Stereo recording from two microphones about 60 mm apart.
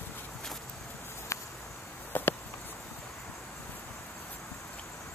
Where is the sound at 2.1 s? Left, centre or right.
Left.